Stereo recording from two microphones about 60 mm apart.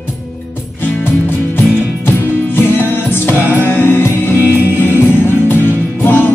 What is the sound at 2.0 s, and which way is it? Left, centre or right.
Music, left.